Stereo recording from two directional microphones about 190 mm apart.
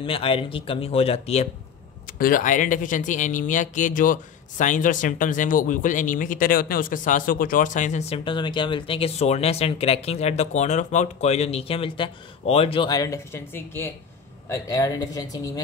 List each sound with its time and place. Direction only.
0.0 s speech: 30° left (ahead or behind)
2.0 s speech: 50° left (ahead or behind); by 15.6 s 20° left (ahead or behind)